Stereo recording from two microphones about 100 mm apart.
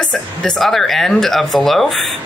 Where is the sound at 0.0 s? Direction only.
10° left (ahead or behind).